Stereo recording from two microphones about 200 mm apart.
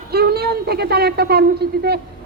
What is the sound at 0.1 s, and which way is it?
A woman's voice, 55° right (ahead or behind).